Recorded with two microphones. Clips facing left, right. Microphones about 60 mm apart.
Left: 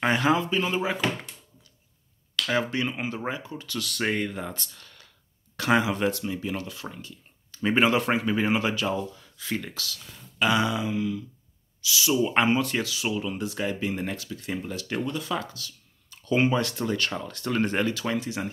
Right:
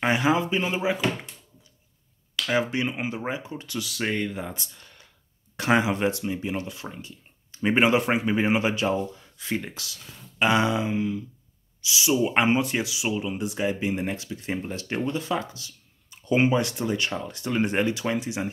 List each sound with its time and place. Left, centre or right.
0.0 s speech: centre
2.5 s speech: centre
3.8 s speech: centre